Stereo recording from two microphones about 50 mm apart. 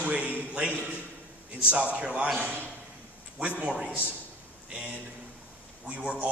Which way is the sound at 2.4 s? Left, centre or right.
Right.